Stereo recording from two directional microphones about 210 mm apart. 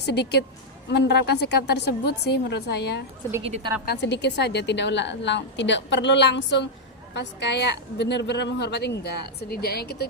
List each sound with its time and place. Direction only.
0.0 s a woman's voice: 50° left (ahead or behind)
3.4 s speech: 25° right (ahead or behind)
3.8 s a woman's voice: 55° left (ahead or behind)